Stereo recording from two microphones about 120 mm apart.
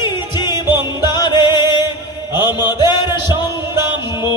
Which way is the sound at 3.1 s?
20° right (ahead or behind).